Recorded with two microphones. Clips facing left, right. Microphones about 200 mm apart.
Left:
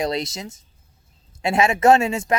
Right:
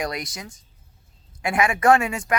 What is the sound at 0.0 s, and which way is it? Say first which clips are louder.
Speech: left 5 dB; 25° left (ahead or behind).